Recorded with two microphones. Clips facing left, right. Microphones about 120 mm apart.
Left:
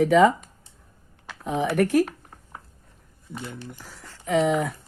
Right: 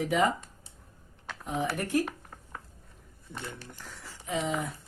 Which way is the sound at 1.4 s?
90° left.